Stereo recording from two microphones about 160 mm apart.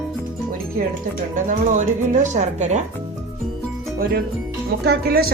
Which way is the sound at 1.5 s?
50° right (ahead or behind).